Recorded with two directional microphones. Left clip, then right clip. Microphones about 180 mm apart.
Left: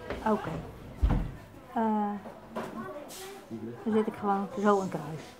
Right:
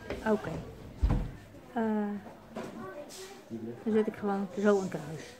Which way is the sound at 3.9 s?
25° right (ahead or behind).